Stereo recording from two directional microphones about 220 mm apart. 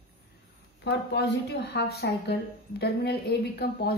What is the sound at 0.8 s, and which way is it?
Speech, 50° left (ahead or behind).